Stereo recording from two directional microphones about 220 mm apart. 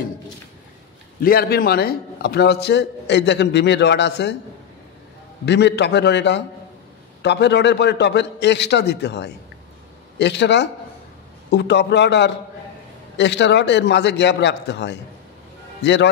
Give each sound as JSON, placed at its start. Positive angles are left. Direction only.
{"t": 1.2, "sound": "a man's voice", "side_deg": 45}
{"t": 5.4, "sound": "a man's voice", "side_deg": 50}